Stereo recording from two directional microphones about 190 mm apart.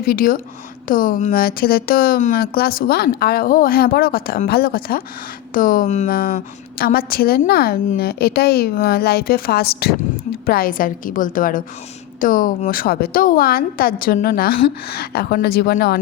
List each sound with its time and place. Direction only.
0.0 s a woman's voice: 50° left (ahead or behind)